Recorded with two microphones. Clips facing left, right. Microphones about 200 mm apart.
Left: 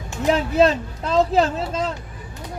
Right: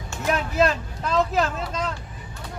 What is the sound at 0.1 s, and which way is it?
Speech, 25° left (ahead or behind).